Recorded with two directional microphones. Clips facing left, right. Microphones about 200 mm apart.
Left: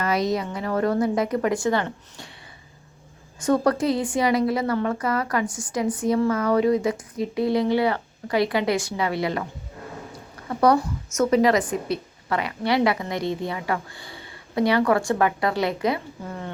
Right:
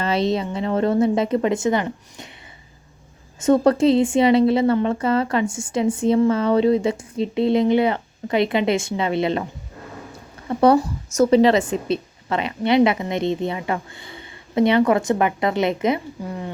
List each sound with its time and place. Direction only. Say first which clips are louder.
0.0 s a woman's voice: right 2 dB; 25° right (ahead or behind)
3.4 s a woman's voice: right 5 dB; 25° right (ahead or behind)
10.5 s a woman's voice: right 4 dB; 25° right (ahead or behind)